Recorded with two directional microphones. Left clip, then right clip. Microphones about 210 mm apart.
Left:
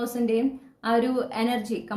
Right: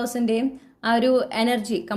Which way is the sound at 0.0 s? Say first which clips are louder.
Right 1 dB; 40° right (ahead or behind).